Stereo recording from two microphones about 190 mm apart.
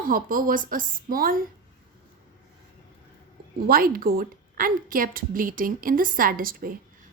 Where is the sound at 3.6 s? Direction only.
50° right (ahead or behind).